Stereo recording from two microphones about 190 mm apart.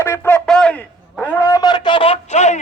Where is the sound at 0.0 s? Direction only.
10° left (ahead or behind).